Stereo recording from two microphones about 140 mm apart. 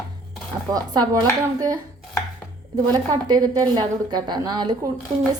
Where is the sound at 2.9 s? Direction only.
30° right (ahead or behind).